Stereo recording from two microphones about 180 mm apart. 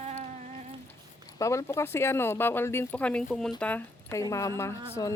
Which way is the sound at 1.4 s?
15° left (ahead or behind).